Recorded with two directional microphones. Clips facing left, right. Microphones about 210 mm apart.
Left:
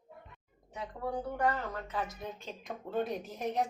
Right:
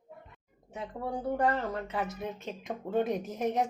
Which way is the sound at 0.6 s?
25° right (ahead or behind).